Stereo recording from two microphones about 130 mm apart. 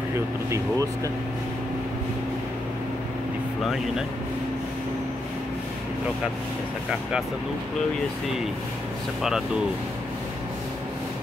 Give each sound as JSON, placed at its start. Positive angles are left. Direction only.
{"t": 0.5, "sound": "speech", "side_deg": -25}
{"t": 6.9, "sound": "speech", "side_deg": -5}